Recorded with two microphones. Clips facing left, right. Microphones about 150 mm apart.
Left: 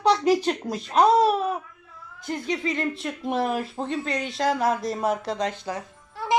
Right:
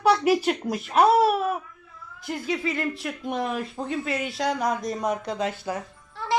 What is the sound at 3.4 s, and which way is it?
Speech, 35° left (ahead or behind).